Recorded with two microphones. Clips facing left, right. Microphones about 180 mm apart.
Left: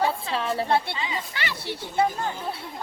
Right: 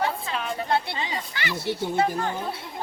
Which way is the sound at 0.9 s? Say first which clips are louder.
Even; 40° right (ahead or behind).